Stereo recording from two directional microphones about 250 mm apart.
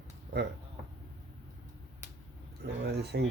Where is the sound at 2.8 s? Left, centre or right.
Right.